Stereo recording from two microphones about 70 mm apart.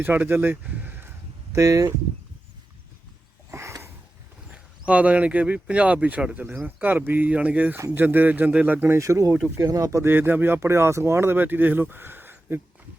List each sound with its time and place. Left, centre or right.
0.0 s speech: right
1.5 s speech: right
3.5 s a sound: right
4.5 s speech: right
9.0 s speech: right
10.1 s speech: right